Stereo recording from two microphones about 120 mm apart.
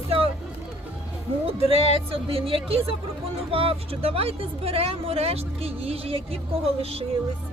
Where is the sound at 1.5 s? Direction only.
50° right (ahead or behind).